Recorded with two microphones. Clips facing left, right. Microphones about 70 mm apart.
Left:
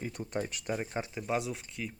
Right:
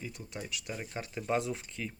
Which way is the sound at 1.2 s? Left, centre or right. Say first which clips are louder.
Right 3 dB; centre.